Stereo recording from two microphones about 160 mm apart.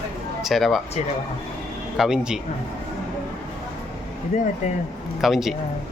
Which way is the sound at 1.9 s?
5° right (ahead or behind).